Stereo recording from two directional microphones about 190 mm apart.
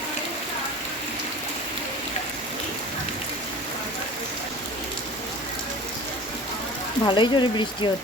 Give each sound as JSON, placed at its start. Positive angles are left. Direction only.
{"t": 7.0, "sound": "speech", "side_deg": 25}